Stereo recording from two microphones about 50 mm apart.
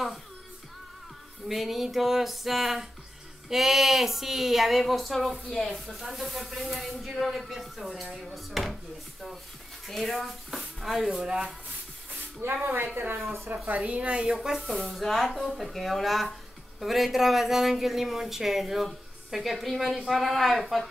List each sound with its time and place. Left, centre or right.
1.5 s speech: centre
9.8 s speech: centre
11.1 s speech: centre
12.4 s speech: right
13.7 s a woman's voice: right
14.4 s speech: centre